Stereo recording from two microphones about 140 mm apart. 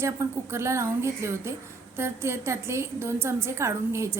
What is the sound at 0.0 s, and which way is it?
A woman's voice, 20° right (ahead or behind).